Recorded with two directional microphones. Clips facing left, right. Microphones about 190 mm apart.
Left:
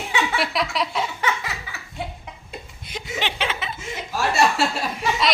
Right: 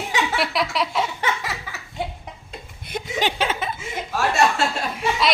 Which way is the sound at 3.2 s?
40° right (ahead or behind).